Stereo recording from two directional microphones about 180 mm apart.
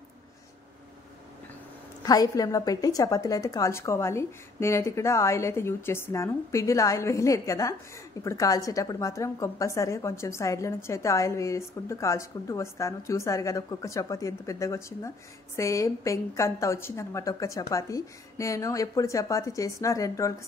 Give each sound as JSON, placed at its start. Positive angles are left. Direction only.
{"t": 2.0, "sound": "a woman's voice", "side_deg": 20}